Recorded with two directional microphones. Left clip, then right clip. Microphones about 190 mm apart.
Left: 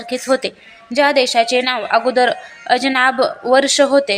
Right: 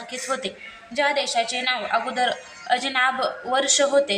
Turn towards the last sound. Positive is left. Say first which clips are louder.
# left 6 dB
turn(degrees=40)  # may be behind; listen again after turning